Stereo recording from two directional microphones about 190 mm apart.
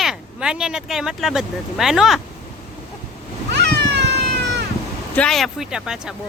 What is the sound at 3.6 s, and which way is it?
Cat, 65° right (ahead or behind).